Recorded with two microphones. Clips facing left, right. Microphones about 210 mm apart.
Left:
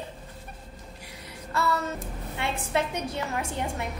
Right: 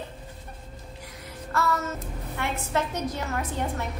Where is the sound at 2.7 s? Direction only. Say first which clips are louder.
Even; 10° left (ahead or behind).